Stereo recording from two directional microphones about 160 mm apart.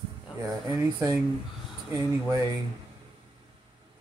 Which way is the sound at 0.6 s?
20° right (ahead or behind).